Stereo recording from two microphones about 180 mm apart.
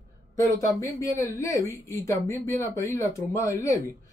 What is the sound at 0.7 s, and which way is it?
Speech, 15° left (ahead or behind).